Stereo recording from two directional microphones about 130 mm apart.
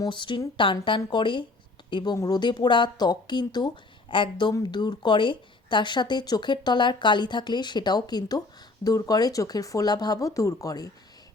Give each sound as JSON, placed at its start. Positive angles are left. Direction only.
{"t": 0.0, "sound": "speech", "side_deg": 40}